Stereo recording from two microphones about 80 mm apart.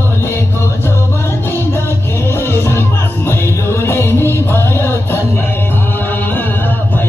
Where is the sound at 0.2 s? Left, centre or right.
Left.